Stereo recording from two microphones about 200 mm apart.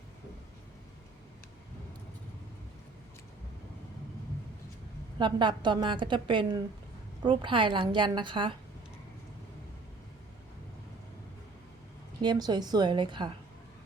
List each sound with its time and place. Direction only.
5.2 s a woman's voice: 25° right (ahead or behind)
12.2 s a woman's voice: 20° right (ahead or behind)